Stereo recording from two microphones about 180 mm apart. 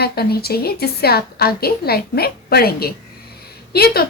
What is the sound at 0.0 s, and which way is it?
A woman's voice, 60° left (ahead or behind).